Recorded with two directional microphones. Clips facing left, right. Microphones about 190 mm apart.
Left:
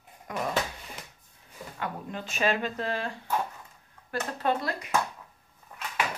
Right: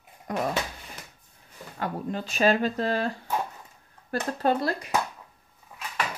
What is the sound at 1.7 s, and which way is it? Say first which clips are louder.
Speech: right 5 dB; 35° right (ahead or behind).